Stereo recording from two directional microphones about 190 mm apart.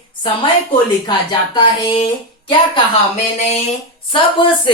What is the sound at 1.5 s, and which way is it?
Speech, 25° left (ahead or behind).